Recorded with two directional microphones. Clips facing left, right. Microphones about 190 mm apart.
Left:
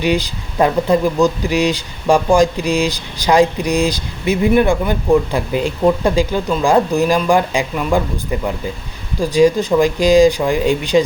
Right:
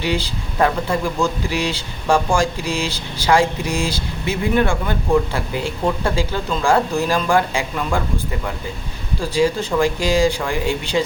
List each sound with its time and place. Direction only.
0.0 s speech: 15° left (ahead or behind)
9.3 s speech: 15° left (ahead or behind)